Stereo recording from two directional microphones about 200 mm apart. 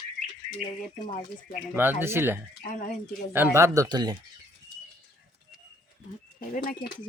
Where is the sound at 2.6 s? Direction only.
40° left (ahead or behind).